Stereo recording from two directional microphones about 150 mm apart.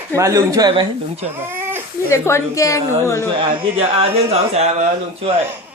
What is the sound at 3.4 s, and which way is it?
Speech, 35° right (ahead or behind).